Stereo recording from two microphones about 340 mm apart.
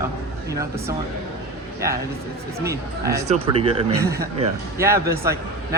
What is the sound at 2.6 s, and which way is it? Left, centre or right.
Speech, centre.